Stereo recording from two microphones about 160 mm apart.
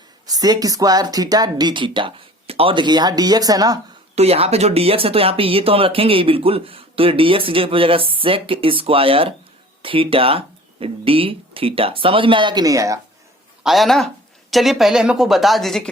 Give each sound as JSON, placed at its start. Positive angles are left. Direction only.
{"t": 0.3, "sound": "speech", "side_deg": -25}
{"t": 4.1, "sound": "speech", "side_deg": -40}
{"t": 13.7, "sound": "speech", "side_deg": 0}